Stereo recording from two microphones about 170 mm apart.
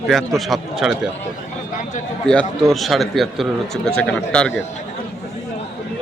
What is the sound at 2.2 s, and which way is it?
Speech, 5° left (ahead or behind).